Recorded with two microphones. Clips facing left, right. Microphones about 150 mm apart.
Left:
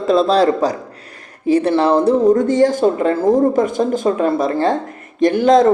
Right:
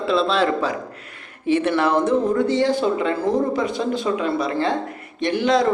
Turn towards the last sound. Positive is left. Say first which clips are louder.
# left 7 dB
turn(degrees=45)  # may be behind; listen again after turning